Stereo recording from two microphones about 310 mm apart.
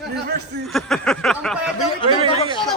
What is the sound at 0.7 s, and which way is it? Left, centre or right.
A man's voice, centre.